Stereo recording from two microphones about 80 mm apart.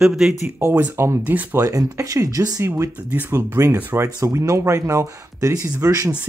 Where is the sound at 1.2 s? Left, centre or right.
Right.